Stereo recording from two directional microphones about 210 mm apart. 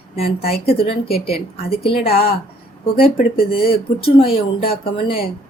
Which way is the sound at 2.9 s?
25° left (ahead or behind).